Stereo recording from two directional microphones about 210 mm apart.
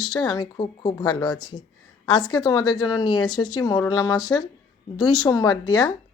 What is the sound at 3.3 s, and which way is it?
Speech, 90° left.